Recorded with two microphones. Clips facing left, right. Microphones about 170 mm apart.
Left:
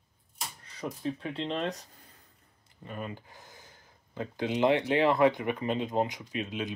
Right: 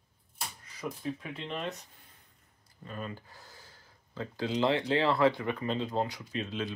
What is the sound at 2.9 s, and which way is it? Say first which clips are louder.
Speech: left 1 dB; 15° left (ahead or behind).